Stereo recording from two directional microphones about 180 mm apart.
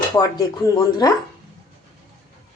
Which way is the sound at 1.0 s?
20° left (ahead or behind).